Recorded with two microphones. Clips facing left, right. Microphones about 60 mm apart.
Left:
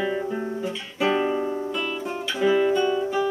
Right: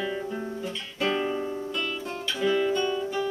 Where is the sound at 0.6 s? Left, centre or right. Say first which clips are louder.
Left 4 dB; centre.